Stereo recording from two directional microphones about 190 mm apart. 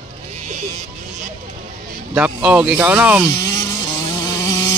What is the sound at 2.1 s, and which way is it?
Speech, 5° right (ahead or behind).